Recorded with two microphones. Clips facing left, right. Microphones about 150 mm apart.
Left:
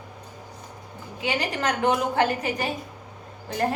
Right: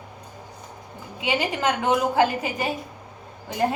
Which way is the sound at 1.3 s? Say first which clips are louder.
Right 3 dB; 5° right (ahead or behind).